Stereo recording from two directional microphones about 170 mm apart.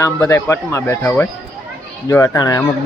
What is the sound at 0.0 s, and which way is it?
Speech, 15° left (ahead or behind).